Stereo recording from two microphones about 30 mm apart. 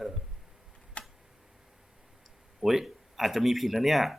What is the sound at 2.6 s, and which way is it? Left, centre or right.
Speech, centre.